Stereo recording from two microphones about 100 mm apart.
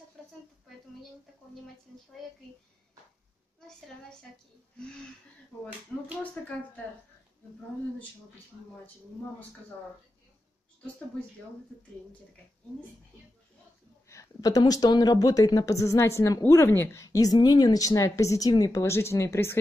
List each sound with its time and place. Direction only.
6.4 s speech: 15° left (ahead or behind)
14.0 s speech: 35° left (ahead or behind)